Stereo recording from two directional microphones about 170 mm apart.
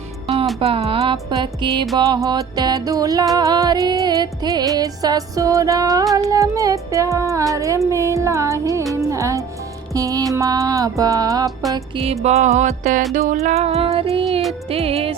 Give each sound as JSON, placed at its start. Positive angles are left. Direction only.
{"t": 0.6, "sound": "music", "side_deg": -35}
{"t": 11.7, "sound": "music", "side_deg": -35}